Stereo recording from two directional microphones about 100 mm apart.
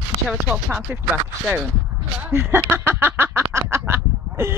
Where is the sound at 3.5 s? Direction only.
25° right (ahead or behind).